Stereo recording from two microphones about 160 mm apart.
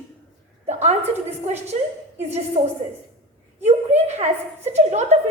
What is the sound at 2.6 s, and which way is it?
A woman's voice, 50° right (ahead or behind).